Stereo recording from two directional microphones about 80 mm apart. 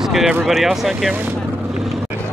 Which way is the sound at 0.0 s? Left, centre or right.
Centre.